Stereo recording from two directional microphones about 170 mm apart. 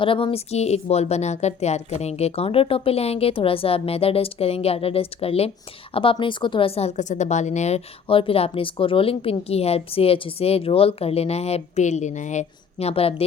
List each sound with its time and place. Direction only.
0.0 s speech: 30° left (ahead or behind)